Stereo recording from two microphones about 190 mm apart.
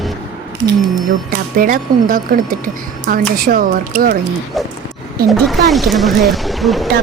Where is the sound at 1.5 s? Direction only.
50° right (ahead or behind).